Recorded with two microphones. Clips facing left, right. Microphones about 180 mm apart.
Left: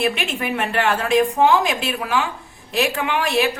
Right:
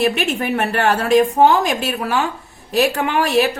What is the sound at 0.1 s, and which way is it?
A woman's voice, 45° right (ahead or behind).